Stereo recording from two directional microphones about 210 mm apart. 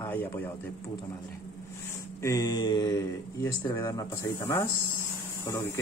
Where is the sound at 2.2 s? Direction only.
15° left (ahead or behind).